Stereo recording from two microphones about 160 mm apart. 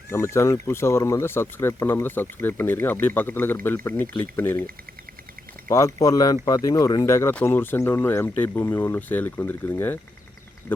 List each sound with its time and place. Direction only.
0.1 s speech: 20° left (ahead or behind)